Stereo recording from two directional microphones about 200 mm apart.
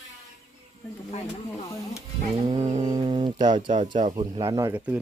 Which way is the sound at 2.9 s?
20° right (ahead or behind).